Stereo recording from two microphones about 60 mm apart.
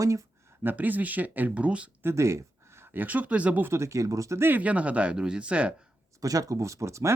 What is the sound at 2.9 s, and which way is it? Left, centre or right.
Speech, right.